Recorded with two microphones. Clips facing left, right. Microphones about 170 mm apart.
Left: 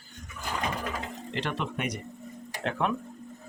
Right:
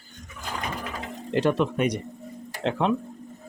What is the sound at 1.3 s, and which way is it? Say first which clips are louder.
Speech: right 10 dB; 45° right (ahead or behind).